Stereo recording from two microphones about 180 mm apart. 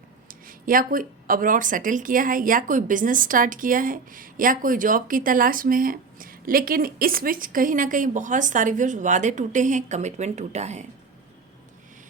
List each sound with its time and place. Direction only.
0.3 s speech: 50° right (ahead or behind)